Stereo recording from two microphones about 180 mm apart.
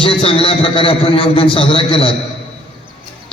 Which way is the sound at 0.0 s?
30° left (ahead or behind).